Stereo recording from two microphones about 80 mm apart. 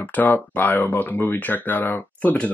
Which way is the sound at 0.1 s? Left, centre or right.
Left.